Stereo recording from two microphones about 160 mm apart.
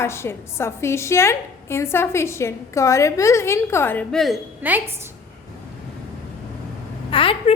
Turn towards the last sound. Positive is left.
turn(degrees=35)  # may be behind; listen again after turning